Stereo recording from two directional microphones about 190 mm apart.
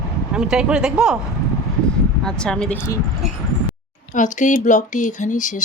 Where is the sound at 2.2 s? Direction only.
5° left (ahead or behind).